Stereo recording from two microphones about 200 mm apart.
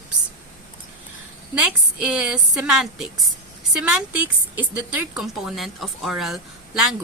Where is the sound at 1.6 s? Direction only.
5° right (ahead or behind).